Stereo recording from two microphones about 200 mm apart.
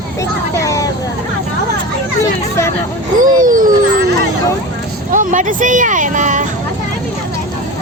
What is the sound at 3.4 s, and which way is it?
Speech, 45° right (ahead or behind).